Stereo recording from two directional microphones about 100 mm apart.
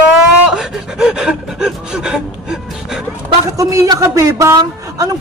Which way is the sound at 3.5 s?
35° right (ahead or behind).